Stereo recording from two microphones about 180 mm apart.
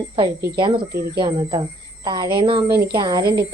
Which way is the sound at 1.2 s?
25° right (ahead or behind).